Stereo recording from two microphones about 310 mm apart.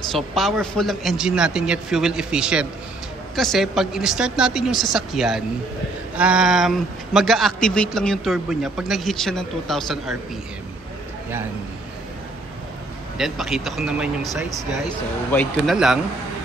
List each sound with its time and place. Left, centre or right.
0.1 s a man's voice: centre
13.2 s a man's voice: centre